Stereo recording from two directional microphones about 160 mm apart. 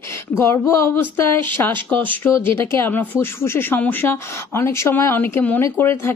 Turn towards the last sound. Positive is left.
turn(degrees=15)  # may be behind; listen again after turning